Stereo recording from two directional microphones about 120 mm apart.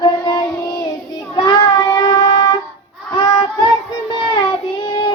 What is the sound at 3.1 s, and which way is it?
Child singing, 45° left (ahead or behind).